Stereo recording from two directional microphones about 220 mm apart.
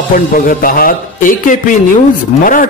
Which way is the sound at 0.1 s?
40° left (ahead or behind).